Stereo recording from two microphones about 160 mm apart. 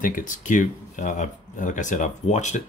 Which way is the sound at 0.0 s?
55° left (ahead or behind).